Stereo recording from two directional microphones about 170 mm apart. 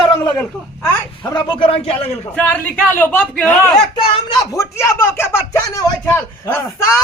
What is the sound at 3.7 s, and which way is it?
Speech, 25° left (ahead or behind).